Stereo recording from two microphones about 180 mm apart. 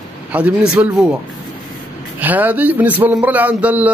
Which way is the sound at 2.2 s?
10° right (ahead or behind).